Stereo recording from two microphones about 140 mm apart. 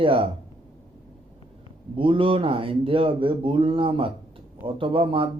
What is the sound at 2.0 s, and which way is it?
A man's voice, 40° right (ahead or behind).